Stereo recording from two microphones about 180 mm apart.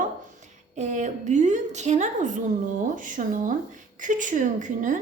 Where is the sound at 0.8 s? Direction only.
40° right (ahead or behind).